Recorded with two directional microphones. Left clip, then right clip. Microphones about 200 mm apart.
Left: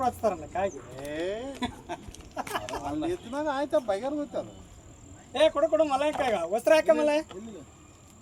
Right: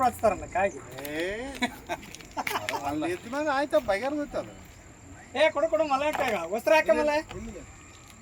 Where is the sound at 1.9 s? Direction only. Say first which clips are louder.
Right 3 dB; 25° right (ahead or behind).